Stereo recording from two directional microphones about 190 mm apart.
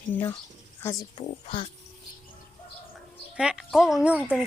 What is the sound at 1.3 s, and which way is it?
Speech, 30° left (ahead or behind).